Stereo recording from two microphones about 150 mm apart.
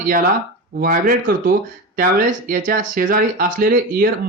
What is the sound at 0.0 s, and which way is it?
Speech, 75° right (ahead or behind).